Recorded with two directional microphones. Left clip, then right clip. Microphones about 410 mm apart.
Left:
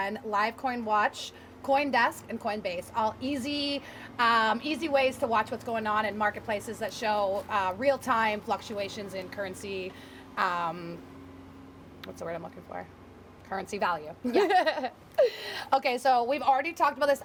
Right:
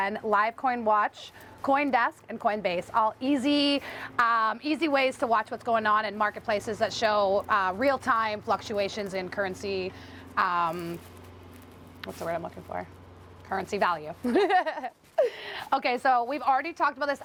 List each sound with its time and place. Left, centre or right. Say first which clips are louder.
0.0 s a woman's voice: right 4 dB; right
12.0 s a woman's voice: right 5 dB; centre